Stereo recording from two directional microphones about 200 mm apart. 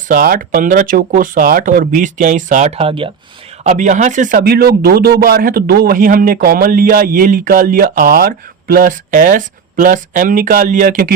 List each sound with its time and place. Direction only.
0.1 s speech: 45° right (ahead or behind)